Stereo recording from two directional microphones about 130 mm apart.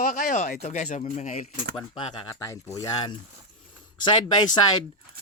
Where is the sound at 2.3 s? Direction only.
20° left (ahead or behind).